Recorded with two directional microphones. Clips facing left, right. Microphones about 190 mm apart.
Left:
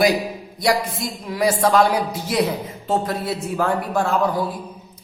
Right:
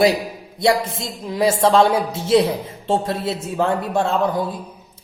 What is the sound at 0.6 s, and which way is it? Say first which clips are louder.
Speech: right 2 dB; 25° right (ahead or behind).